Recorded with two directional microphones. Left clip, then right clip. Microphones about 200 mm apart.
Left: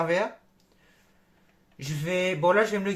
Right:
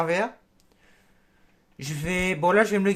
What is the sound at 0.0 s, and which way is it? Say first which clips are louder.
Speech: right 1 dB; 20° right (ahead or behind).